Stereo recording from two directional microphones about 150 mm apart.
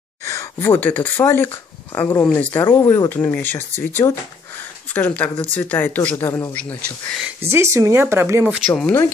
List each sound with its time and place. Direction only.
0.2 s speech: 20° left (ahead or behind)
7.4 s speech: 15° right (ahead or behind)
8.5 s speech: centre (ahead or behind)